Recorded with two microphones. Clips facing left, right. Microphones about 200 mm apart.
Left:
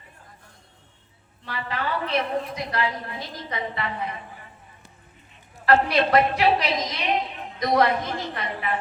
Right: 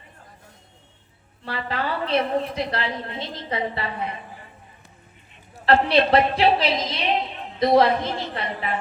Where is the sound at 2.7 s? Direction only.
25° right (ahead or behind).